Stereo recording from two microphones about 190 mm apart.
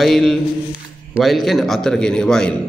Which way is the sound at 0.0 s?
Centre (ahead or behind).